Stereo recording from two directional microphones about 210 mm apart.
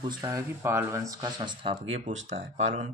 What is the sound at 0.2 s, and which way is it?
Speech, 15° right (ahead or behind).